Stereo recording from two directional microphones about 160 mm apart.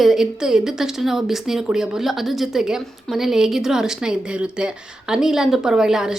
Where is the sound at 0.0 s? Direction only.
Centre (ahead or behind).